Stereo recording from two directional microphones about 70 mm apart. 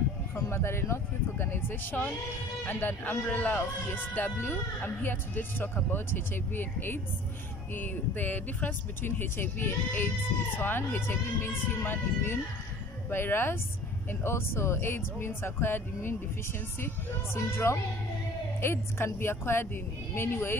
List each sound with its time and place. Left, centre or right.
0.5 s speech: left